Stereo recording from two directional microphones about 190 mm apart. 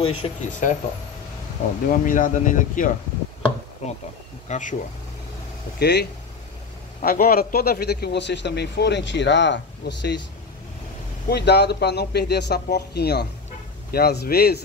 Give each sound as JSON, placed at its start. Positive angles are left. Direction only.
{"t": 0.0, "sound": "speech", "side_deg": 30}
{"t": 0.5, "sound": "speech", "side_deg": 40}
{"t": 1.9, "sound": "speech", "side_deg": 45}
{"t": 5.8, "sound": "a man's voice", "side_deg": 60}
{"t": 7.0, "sound": "a man's voice", "side_deg": 50}
{"t": 11.2, "sound": "a man's voice", "side_deg": 60}